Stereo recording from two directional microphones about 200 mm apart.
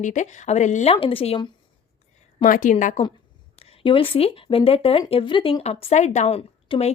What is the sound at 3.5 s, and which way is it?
Speech, 30° left (ahead or behind).